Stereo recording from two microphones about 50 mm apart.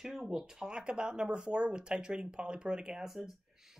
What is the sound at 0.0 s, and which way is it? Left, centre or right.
Speech, centre.